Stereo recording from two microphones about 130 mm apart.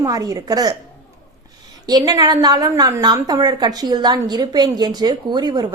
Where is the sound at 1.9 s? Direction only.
30° right (ahead or behind).